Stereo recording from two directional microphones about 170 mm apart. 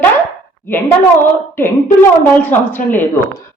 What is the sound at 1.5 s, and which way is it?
A woman's voice, 15° left (ahead or behind).